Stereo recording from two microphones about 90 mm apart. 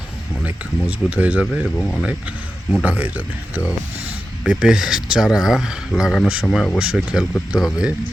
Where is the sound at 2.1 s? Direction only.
15° right (ahead or behind).